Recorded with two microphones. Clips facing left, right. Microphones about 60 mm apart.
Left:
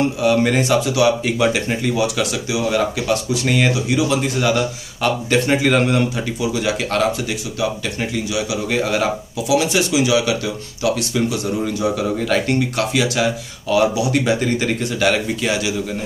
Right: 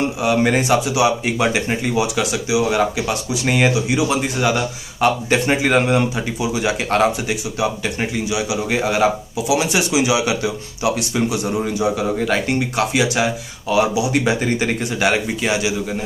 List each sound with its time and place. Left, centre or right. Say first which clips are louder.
0.2 s speech: right 1 dB; centre
8.3 s speech: right 1 dB; centre